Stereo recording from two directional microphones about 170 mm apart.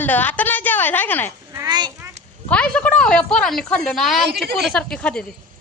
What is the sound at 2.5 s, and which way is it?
A woman's voice, 5° left (ahead or behind).